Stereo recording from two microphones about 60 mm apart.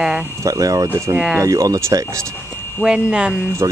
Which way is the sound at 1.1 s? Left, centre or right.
Centre.